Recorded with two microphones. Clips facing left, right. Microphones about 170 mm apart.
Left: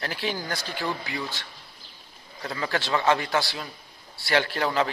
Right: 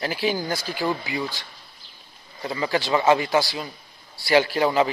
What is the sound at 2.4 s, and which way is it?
Speech, 5° right (ahead or behind).